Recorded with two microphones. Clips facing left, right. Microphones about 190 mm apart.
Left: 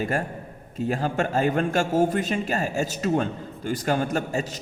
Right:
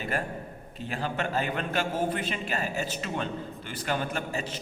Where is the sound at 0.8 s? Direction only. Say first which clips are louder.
Left 7 dB; 45° left (ahead or behind).